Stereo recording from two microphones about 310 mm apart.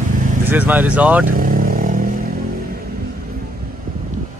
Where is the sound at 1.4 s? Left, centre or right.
Right.